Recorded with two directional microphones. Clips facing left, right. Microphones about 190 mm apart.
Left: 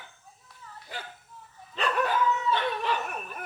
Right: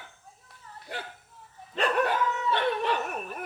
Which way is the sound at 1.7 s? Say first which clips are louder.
Right 2 dB; 65° right (ahead or behind).